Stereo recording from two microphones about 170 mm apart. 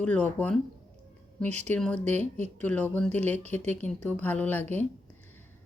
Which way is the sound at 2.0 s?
45° right (ahead or behind).